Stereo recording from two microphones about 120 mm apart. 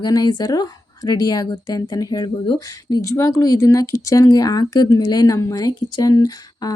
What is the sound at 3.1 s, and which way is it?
Speech, 25° left (ahead or behind).